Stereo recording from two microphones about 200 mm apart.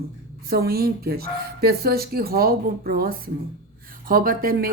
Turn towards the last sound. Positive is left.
turn(degrees=-45)  # may be behind; listen again after turning